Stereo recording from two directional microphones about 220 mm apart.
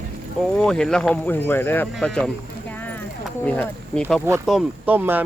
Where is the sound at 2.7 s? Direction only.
10° left (ahead or behind).